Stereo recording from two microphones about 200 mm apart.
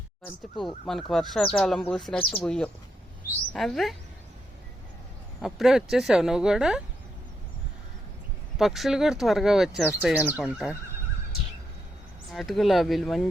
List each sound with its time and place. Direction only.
0.6 s speech: centre (ahead or behind)
2.1 s speech: 25° left (ahead or behind)
2.4 s speech: 5° left (ahead or behind)
5.4 s speech: centre (ahead or behind)
8.5 s speech: centre (ahead or behind)
12.3 s speech: centre (ahead or behind)